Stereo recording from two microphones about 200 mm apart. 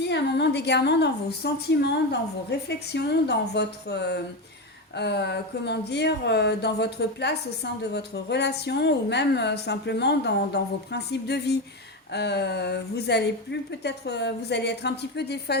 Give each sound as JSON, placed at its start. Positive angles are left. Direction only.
{"t": 0.1, "sound": "a woman's voice", "side_deg": 55}